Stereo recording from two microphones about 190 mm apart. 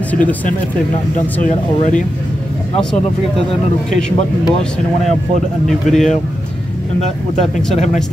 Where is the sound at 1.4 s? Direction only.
40° left (ahead or behind).